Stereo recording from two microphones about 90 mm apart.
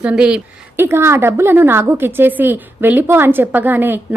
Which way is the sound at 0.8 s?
30° right (ahead or behind).